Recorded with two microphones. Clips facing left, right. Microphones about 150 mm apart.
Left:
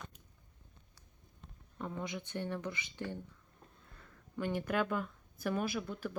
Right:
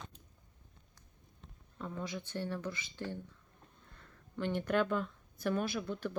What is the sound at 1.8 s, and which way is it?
Speech, 15° left (ahead or behind).